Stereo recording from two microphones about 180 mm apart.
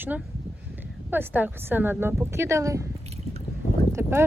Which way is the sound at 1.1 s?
10° right (ahead or behind).